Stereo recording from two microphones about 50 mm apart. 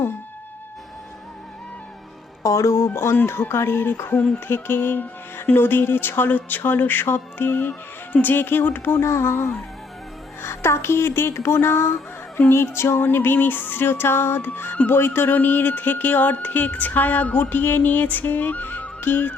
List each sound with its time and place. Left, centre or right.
2.4 s speech: left
4.4 s music: left
6.6 s speech: left
8.1 s music: left
9.0 s speech: left
12.5 s music: left
14.8 s speech: left